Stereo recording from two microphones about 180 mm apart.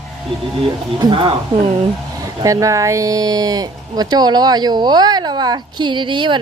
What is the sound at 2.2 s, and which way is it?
Speech, 20° right (ahead or behind).